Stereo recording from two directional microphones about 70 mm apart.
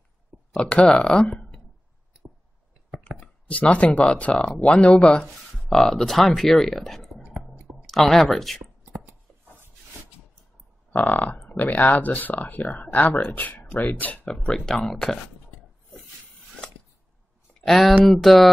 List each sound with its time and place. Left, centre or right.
0.6 s speech: centre
1.3 s a sound: centre
3.2 s speech: centre
5.2 s speech: centre
7.2 s a sound: centre
7.8 s speech: centre
11.0 s speech: left
14.3 s speech: centre
17.6 s speech: centre